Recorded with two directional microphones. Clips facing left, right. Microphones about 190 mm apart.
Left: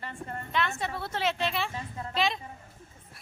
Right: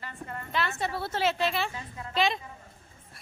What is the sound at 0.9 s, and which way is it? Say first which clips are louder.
Speech: right 3 dB; 30° right (ahead or behind).